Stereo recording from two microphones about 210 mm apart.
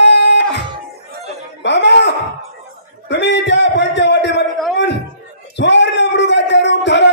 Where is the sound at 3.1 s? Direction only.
55° left (ahead or behind).